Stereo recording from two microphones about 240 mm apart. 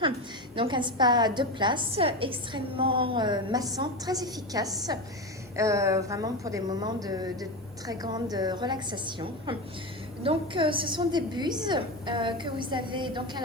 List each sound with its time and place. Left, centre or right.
0.5 s a woman's voice: right